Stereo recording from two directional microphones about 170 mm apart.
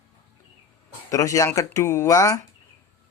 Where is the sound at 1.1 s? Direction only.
20° left (ahead or behind).